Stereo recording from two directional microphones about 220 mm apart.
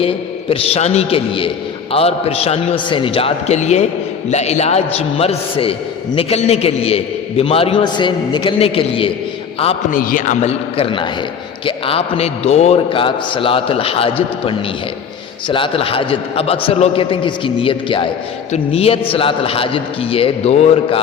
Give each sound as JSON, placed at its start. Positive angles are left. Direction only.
{"t": 0.0, "sound": "a man's voice", "side_deg": 25}
{"t": 10.0, "sound": "a man's voice", "side_deg": 40}